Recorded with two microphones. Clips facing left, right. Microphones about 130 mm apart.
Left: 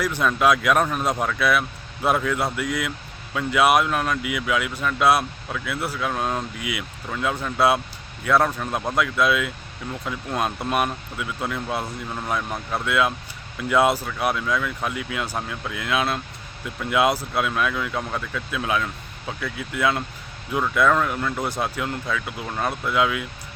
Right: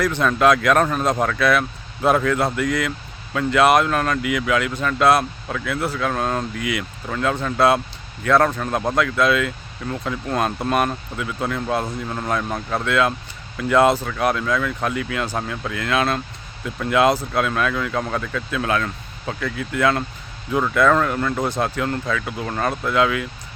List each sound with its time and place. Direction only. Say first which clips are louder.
0.0 s speech: right 3 dB; 10° left (ahead or behind)